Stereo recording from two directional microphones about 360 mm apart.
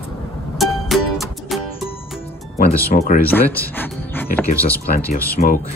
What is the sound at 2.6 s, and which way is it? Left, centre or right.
Speech, centre.